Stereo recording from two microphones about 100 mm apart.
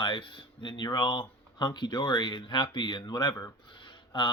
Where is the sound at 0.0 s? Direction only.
55° left (ahead or behind).